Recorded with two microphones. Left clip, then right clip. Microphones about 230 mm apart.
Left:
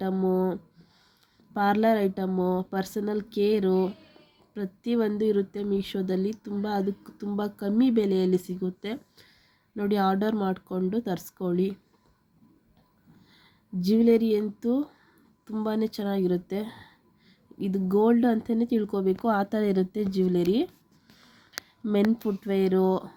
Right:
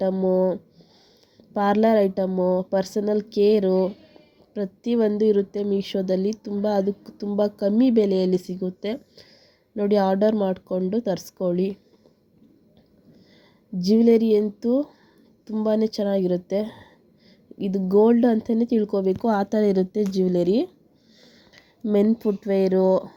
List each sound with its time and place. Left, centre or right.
0.0 s speech: centre
13.8 s speech: centre
21.2 s a sound: centre
21.8 s speech: centre